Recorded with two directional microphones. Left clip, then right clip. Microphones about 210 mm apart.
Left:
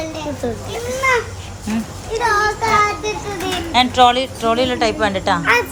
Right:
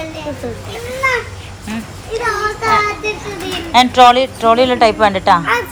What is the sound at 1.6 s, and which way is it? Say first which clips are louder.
Speech: left 2 dB; 15° left (ahead or behind).